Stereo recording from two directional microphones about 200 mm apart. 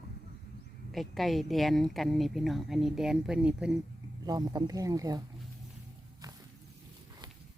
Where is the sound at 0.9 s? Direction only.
Centre (ahead or behind).